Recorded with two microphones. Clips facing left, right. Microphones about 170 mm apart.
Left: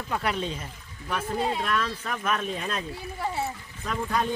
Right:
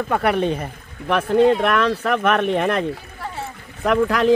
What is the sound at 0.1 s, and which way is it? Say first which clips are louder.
Speech: right 9 dB; 60° right (ahead or behind).